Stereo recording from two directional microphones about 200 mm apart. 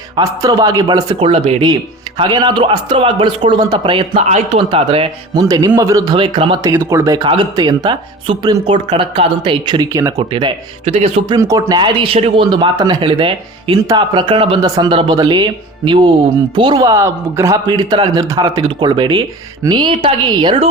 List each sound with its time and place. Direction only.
0.2 s speech: 20° right (ahead or behind)
10.2 s speech: 30° right (ahead or behind)
11.3 s speech: 15° right (ahead or behind)